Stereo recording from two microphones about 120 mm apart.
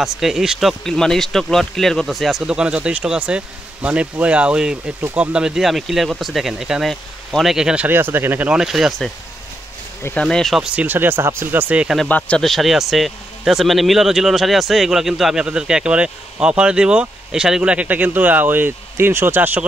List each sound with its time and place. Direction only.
0.0 s speech: 5° right (ahead or behind)
10.2 s speech: centre (ahead or behind)
10.7 s speech: 15° right (ahead or behind)
12.1 s speech: 10° left (ahead or behind); by 19.6 s 15° right (ahead or behind)